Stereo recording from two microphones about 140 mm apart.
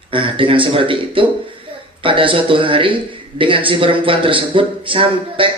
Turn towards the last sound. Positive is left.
turn(degrees=-40)  # may be behind; listen again after turning